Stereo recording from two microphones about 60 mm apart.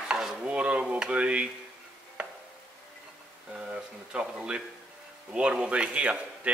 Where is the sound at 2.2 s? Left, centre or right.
Right.